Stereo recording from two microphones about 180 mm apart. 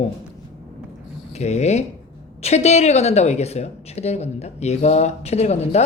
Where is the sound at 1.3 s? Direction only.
40° left (ahead or behind).